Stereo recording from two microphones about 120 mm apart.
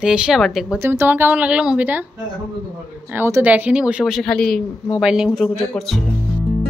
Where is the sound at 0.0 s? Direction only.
5° right (ahead or behind).